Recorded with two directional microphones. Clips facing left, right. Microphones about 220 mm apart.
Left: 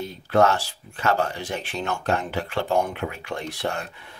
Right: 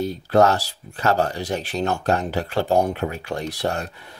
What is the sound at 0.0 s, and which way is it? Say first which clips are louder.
Speech: right 3 dB; 35° right (ahead or behind).